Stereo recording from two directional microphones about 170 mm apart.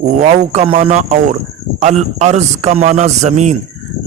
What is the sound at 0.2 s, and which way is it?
A man's voice, 40° right (ahead or behind).